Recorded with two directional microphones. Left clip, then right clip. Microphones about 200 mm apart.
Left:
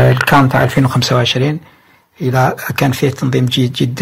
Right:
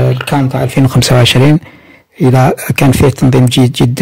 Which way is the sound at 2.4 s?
50° right (ahead or behind).